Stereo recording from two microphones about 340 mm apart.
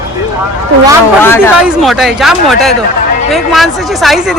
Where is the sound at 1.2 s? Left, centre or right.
Centre.